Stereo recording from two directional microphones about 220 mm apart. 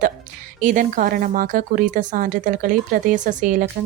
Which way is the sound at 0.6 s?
35° right (ahead or behind).